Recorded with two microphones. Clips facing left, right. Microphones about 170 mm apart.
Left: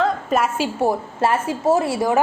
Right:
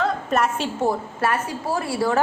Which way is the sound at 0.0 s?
5° left (ahead or behind).